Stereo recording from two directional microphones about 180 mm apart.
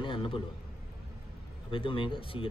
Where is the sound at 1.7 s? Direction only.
30° left (ahead or behind).